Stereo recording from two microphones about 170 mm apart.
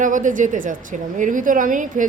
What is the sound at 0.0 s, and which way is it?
A woman's voice, 50° right (ahead or behind).